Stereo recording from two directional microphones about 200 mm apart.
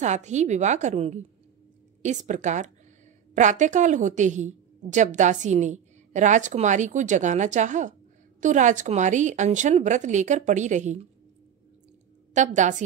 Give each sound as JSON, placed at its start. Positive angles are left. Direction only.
{"t": 0.0, "sound": "a woman's voice", "side_deg": -35}
{"t": 12.4, "sound": "a woman's voice", "side_deg": -40}